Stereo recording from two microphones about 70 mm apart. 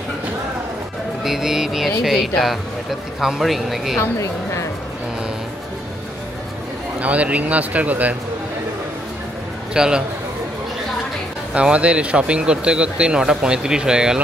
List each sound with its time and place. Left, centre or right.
1.2 s speech: centre
4.0 s a woman's voice: left
7.0 s speech: centre
9.8 s speech: centre
11.5 s speech: centre